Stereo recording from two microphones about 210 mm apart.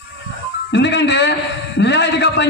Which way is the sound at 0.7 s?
55° left (ahead or behind).